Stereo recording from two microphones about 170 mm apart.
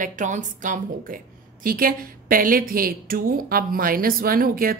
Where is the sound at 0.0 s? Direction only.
50° right (ahead or behind).